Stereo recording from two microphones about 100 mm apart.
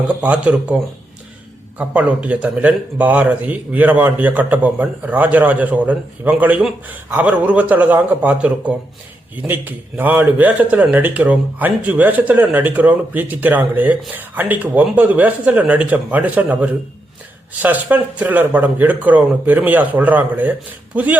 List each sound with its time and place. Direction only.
0.1 s a man's voice: 15° right (ahead or behind)
1.8 s a man's voice: 15° right (ahead or behind)